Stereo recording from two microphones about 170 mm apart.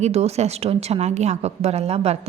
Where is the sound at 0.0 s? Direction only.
40° right (ahead or behind).